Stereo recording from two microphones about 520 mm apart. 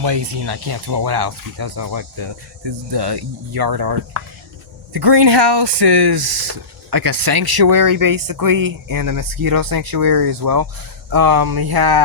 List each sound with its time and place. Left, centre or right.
0.0 s speech: right